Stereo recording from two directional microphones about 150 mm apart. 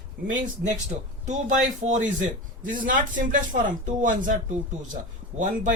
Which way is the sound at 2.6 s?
60° right (ahead or behind).